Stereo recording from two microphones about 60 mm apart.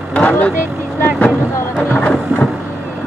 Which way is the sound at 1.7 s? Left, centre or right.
Left.